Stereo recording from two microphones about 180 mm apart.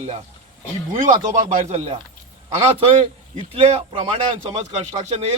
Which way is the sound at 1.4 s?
45° right (ahead or behind).